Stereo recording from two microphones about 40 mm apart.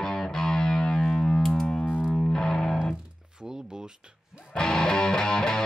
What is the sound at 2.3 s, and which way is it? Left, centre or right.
Music, centre.